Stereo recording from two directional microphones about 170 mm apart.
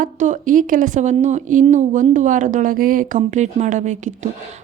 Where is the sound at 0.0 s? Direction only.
50° right (ahead or behind).